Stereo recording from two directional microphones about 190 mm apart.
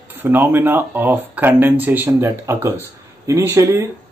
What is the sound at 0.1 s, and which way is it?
Speech, 10° right (ahead or behind).